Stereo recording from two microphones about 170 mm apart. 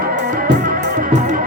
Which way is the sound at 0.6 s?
50° right (ahead or behind).